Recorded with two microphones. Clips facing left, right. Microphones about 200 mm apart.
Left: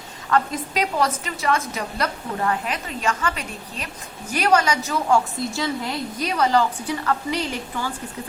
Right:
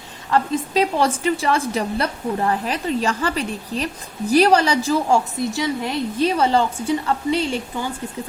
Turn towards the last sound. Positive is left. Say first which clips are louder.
# right 4 dB
turn(degrees=-25)  # may be behind; listen again after turning